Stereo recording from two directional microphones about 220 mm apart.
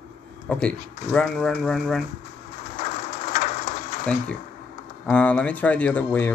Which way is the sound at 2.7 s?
30° left (ahead or behind).